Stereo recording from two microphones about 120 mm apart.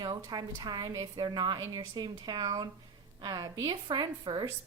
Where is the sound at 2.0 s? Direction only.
35° right (ahead or behind).